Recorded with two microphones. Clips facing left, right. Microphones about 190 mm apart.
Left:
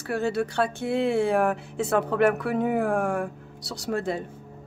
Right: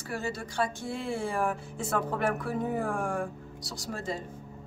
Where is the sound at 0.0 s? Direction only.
65° left (ahead or behind).